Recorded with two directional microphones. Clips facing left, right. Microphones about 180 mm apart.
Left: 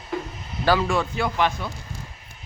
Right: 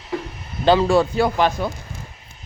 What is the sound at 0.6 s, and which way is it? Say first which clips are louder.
A man's voice: right 6 dB; 25° right (ahead or behind).